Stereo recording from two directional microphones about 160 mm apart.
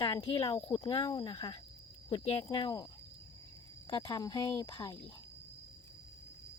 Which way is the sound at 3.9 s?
30° left (ahead or behind).